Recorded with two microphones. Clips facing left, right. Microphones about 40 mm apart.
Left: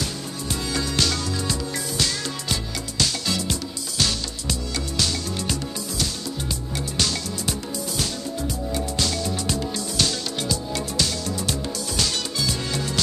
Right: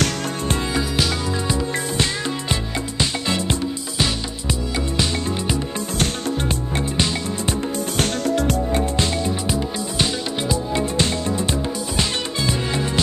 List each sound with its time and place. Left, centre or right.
0.7 s music: centre
3.0 s music: right
7.0 s music: right
8.7 s music: right